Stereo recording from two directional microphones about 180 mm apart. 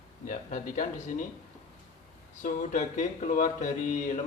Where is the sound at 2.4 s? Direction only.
45° left (ahead or behind).